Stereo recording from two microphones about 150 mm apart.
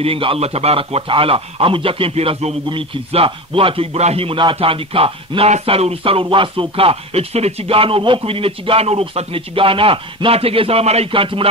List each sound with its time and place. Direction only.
0.0 s a man's voice: 40° right (ahead or behind)